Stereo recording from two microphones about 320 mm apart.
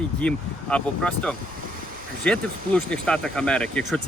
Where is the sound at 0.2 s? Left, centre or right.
Centre.